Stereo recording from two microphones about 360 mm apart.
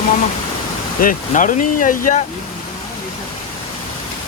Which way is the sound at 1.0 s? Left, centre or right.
Left.